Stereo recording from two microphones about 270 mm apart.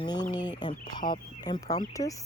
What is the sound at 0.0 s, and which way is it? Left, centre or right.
Speech, centre.